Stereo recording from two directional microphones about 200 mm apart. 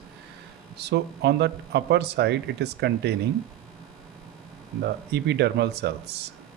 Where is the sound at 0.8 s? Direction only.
55° right (ahead or behind).